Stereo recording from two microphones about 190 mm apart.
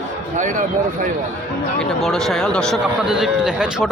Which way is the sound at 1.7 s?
Centre (ahead or behind).